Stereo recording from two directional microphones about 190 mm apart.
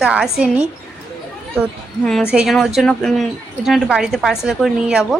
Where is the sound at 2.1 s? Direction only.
Centre (ahead or behind).